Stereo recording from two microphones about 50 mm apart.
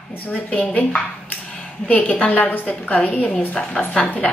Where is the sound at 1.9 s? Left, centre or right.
Left.